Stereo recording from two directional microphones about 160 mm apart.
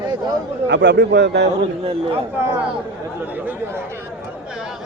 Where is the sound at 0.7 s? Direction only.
90° right.